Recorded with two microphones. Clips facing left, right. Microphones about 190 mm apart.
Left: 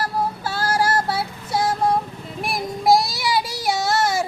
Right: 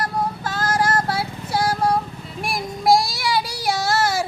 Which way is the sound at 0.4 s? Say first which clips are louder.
Even; 10° left (ahead or behind).